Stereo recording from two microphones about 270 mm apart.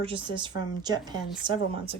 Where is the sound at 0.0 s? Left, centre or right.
Centre.